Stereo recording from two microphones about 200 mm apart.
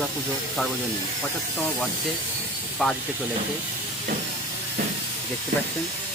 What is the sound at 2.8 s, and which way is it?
Speech, centre (ahead or behind).